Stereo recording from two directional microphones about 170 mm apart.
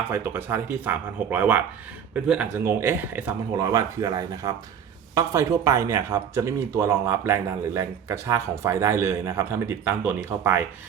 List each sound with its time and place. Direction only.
0.1 s speech: 15° right (ahead or behind)